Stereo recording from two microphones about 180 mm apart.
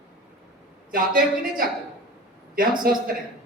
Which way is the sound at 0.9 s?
50° right (ahead or behind).